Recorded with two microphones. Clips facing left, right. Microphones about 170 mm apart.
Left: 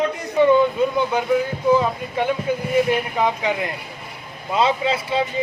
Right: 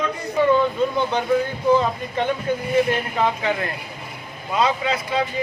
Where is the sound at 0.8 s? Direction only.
10° left (ahead or behind).